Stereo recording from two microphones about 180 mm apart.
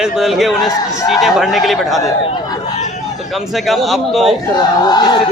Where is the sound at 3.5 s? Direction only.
Centre (ahead or behind).